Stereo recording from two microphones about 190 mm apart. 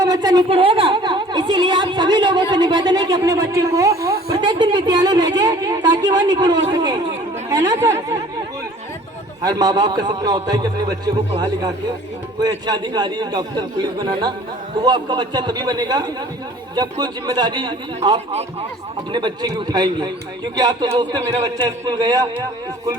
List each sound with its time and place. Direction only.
0.0 s a sound: 20° right (ahead or behind)
7.5 s speech: 20° right (ahead or behind)
9.4 s a man's voice: 20° right (ahead or behind)